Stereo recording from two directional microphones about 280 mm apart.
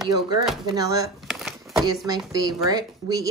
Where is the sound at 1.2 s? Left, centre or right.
Centre.